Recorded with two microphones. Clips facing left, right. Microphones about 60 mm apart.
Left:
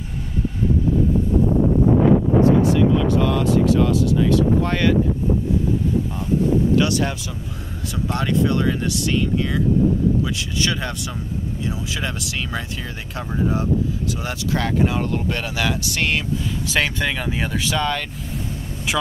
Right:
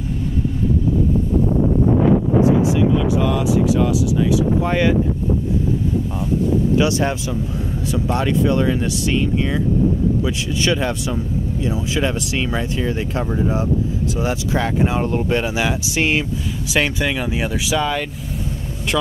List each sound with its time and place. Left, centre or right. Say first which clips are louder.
2.4 s wind noise: even; centre
4.6 s speech: right 2 dB; centre
7.9 s speech: right 2 dB; right
10.2 s speech: right 3 dB; right
14.2 s speech: right 4 dB; centre